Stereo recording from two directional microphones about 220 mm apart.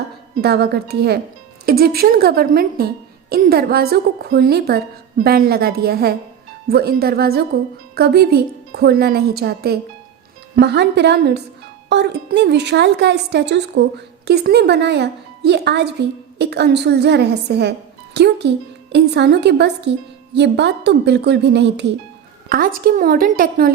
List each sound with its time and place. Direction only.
0.4 s speech: 45° right (ahead or behind)
22.4 s a woman's voice: 40° right (ahead or behind)